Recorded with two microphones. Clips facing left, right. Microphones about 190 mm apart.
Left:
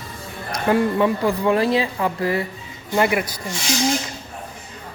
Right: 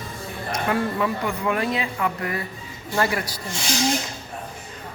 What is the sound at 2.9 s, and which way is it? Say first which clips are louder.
Speech: left 4 dB; 15° left (ahead or behind).